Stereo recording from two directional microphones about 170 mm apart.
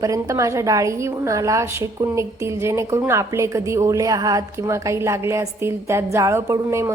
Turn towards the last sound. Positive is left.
turn(degrees=-15)  # may be behind; listen again after turning